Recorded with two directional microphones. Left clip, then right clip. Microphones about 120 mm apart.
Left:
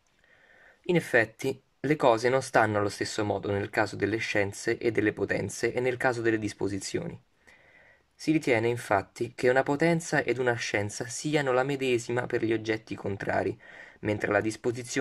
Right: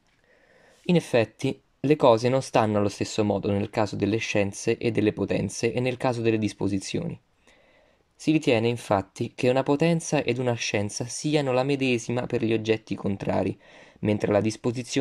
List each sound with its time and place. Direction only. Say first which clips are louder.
0.8 s speech: right 2 dB; 25° right (ahead or behind)
8.2 s speech: right 3 dB; 25° right (ahead or behind)